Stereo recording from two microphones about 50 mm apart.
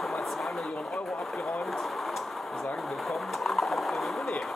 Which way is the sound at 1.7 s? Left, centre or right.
Centre.